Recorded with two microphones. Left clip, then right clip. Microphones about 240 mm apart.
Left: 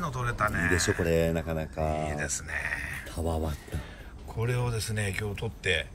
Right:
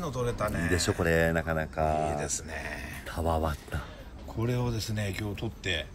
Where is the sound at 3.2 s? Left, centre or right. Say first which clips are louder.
Right 5 dB; right.